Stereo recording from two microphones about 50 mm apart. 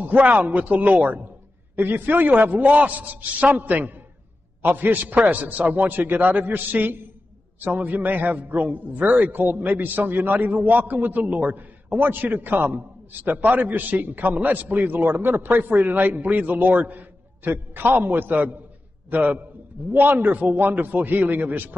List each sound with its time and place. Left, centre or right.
0.0 s a man's voice: right